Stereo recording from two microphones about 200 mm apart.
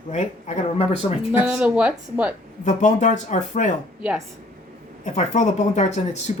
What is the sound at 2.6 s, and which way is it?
Speech, 40° left (ahead or behind).